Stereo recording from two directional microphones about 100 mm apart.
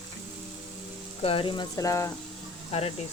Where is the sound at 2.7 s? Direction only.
80° left.